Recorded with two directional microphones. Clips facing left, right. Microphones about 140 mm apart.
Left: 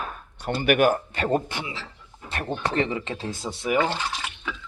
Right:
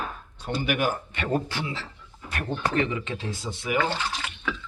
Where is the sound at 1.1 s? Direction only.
35° left (ahead or behind).